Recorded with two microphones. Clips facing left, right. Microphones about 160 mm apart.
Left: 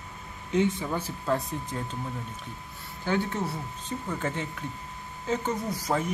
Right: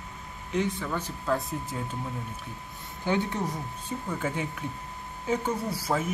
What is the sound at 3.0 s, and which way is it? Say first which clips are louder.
Speech: even; 15° right (ahead or behind).